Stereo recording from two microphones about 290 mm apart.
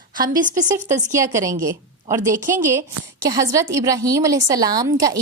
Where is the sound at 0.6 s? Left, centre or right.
Right.